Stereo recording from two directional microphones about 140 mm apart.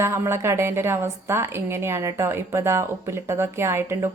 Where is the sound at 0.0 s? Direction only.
20° right (ahead or behind).